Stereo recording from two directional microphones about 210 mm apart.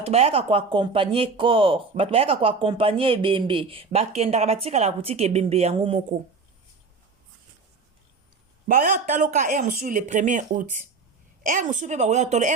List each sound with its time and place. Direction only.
0.0 s speech: 30° right (ahead or behind)
8.6 s speech: 40° right (ahead or behind)